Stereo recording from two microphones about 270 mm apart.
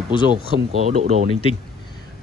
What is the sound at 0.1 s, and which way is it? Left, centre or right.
Speech, centre.